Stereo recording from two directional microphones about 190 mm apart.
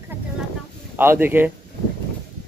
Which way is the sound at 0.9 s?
10° right (ahead or behind).